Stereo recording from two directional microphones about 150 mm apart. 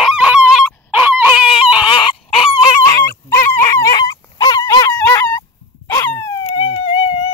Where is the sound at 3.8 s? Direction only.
25° left (ahead or behind).